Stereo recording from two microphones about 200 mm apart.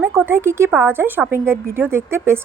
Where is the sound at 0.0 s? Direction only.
10° right (ahead or behind).